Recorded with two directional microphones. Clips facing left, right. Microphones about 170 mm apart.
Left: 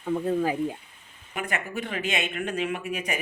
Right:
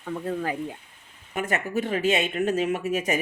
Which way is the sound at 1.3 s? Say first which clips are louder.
Right 5 dB; 40° right (ahead or behind).